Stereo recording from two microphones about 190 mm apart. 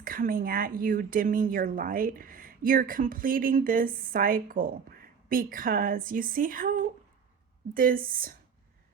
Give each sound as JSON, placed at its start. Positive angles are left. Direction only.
{"t": 0.0, "sound": "speech", "side_deg": -50}